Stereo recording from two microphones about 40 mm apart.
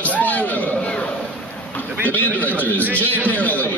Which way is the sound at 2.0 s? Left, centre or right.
Left.